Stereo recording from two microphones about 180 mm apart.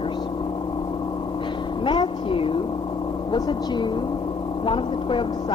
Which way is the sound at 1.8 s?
25° left (ahead or behind).